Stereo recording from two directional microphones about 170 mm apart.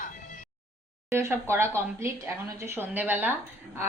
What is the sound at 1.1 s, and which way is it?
A woman's voice, 15° right (ahead or behind).